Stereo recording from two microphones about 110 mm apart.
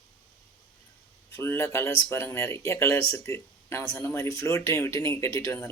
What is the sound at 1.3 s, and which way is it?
Speech, 20° left (ahead or behind).